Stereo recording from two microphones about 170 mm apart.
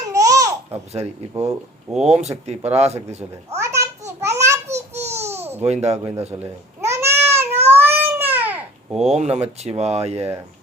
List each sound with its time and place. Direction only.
0.1 s babbling: 20° right (ahead or behind)
0.7 s speech: 40° right (ahead or behind)
3.6 s a sound: 15° right (ahead or behind)
4.7 s babbling: 15° right (ahead or behind)
5.6 s speech: 40° right (ahead or behind)
6.3 s cat: 15° right (ahead or behind)
9.0 s speech: 40° right (ahead or behind)